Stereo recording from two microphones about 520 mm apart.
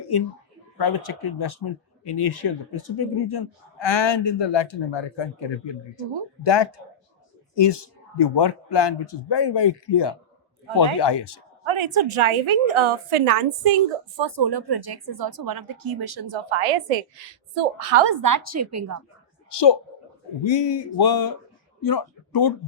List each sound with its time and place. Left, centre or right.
0.8 s speech: left
11.6 s a woman's voice: right
14.2 s a woman's voice: right
18.0 s speech: right
18.3 s a woman's voice: right
19.5 s a woman's voice: left